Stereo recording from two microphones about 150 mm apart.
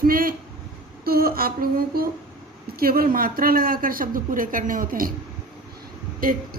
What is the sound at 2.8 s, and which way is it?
A woman's voice, 75° right (ahead or behind).